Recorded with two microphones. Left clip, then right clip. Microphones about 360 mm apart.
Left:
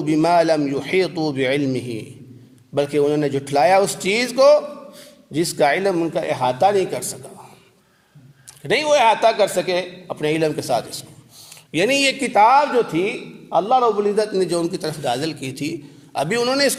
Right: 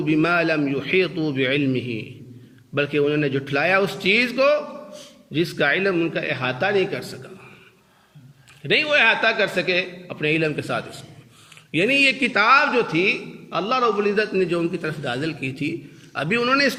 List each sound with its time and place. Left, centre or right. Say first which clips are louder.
0.0 s a man's voice: left 4 dB; centre
8.6 s a man's voice: left 2 dB; centre